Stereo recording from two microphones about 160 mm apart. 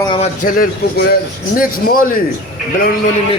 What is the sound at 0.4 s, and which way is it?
Speech, 60° left (ahead or behind).